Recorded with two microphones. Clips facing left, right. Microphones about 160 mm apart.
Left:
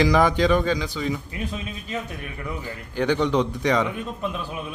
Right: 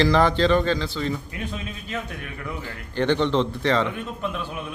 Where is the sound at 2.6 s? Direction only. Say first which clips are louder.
Right 1 dB; 5° left (ahead or behind).